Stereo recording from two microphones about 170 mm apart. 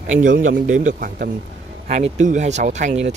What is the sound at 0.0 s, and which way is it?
Speech, 50° right (ahead or behind).